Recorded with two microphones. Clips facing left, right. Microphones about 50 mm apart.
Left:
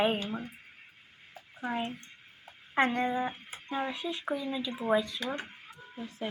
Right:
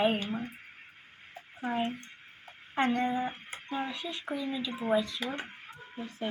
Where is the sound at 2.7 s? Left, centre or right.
Left.